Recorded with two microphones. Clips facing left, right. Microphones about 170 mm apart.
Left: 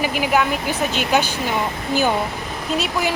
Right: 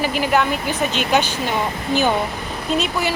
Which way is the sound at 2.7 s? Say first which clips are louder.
Right 1 dB; 10° left (ahead or behind).